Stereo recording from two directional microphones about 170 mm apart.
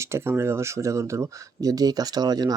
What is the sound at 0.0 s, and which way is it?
Speech, 15° right (ahead or behind).